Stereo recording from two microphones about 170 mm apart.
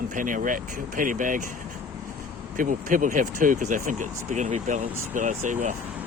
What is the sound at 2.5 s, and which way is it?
Speech, 50° right (ahead or behind).